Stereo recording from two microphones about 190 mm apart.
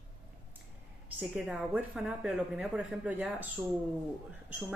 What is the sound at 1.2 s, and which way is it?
Speech, 5° right (ahead or behind).